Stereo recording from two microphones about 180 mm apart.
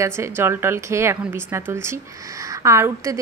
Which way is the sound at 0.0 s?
15° right (ahead or behind).